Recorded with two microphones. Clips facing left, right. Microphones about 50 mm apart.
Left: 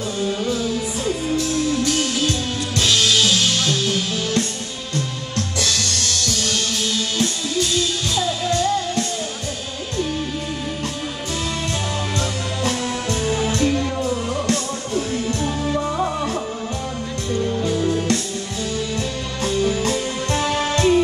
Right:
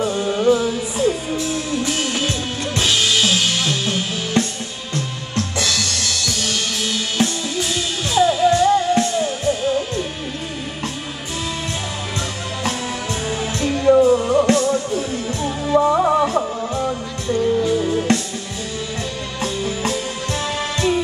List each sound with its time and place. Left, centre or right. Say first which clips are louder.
0.0 s music: right 5 dB; centre
12.6 s music: left 1 dB; centre
14.4 s music: right 7 dB; right
15.0 s music: left 1 dB; centre
15.7 s music: right 12 dB; centre
17.4 s music: right 4 dB; centre
19.4 s music: left 3 dB; centre